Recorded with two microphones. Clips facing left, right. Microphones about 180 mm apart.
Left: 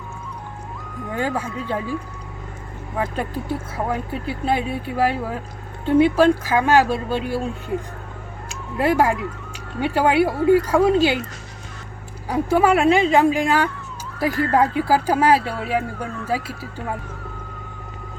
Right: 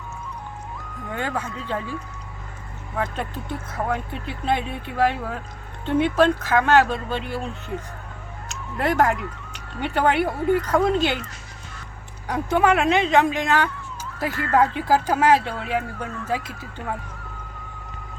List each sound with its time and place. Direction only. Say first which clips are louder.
1.1 s speech: left 4 dB; 10° left (ahead or behind)
3.0 s speech: left 3 dB; 10° left (ahead or behind)
8.8 s speech: left 2 dB; 10° left (ahead or behind)
12.3 s speech: left 3 dB; 10° left (ahead or behind)
14.6 s speech: left 2 dB; 40° left (ahead or behind)
14.8 s speech: left 1 dB; 10° left (ahead or behind)